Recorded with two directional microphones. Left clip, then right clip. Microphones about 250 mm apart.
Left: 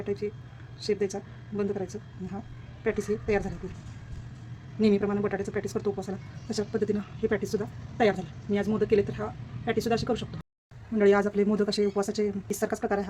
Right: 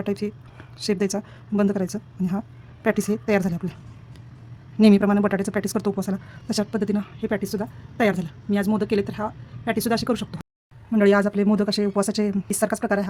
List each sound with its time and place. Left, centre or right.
0.0 s a woman's voice: right
4.8 s a woman's voice: right